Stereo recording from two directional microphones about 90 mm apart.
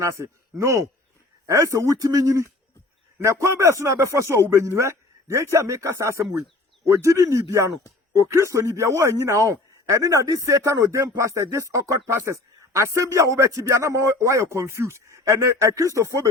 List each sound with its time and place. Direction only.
0.0 s a man's voice: 35° right (ahead or behind)